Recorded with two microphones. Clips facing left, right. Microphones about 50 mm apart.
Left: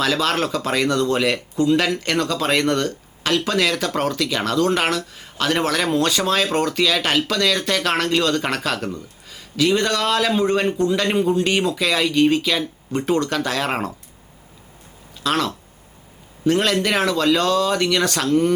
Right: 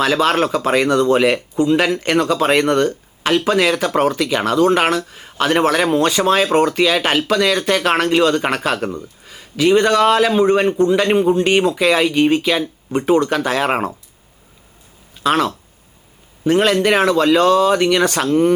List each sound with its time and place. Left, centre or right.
0.0 s speech: centre
15.2 s speech: centre